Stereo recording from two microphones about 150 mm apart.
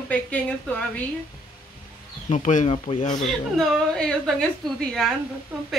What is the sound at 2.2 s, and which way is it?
Speech, 55° left (ahead or behind).